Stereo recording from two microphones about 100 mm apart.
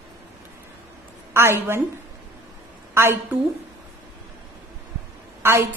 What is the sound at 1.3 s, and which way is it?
Speech, 25° right (ahead or behind).